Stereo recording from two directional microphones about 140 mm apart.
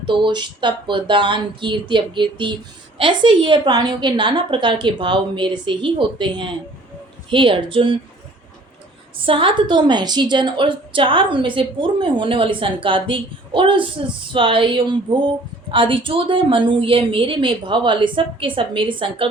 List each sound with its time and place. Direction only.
0.0 s a woman's voice: 35° right (ahead or behind)
9.2 s a woman's voice: 40° right (ahead or behind)